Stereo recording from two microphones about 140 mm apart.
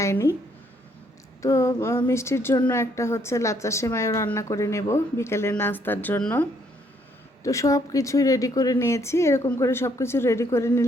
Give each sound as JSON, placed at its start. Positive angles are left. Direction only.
{"t": 0.0, "sound": "a woman's voice", "side_deg": 20}
{"t": 1.4, "sound": "a woman's voice", "side_deg": 20}
{"t": 7.4, "sound": "a woman's voice", "side_deg": 20}